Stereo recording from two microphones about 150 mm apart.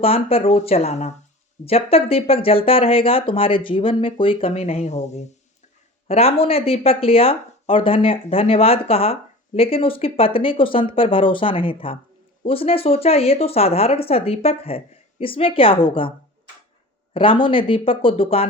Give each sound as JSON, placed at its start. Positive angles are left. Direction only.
{"t": 0.0, "sound": "speech", "side_deg": 40}
{"t": 17.2, "sound": "speech", "side_deg": 35}